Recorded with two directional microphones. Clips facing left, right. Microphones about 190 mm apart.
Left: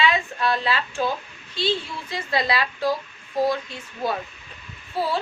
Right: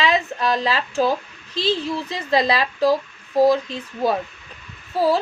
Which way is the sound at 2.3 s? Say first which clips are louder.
Right 5 dB; 35° right (ahead or behind).